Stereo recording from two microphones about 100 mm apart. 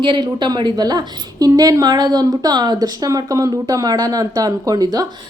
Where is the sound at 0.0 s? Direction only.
55° right (ahead or behind).